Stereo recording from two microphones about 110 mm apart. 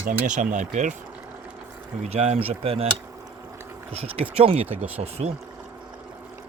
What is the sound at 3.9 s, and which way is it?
Speech, 65° right (ahead or behind).